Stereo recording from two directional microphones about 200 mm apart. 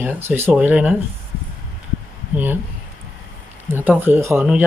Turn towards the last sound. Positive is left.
turn(degrees=-10)  # may be behind; listen again after turning